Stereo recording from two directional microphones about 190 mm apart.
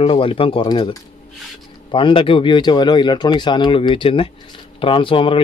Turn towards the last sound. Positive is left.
turn(degrees=25)  # may be behind; listen again after turning